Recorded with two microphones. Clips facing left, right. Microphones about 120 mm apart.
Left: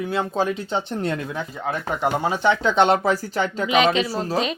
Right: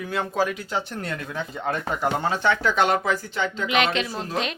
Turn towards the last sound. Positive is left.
turn(degrees=35)  # may be behind; listen again after turning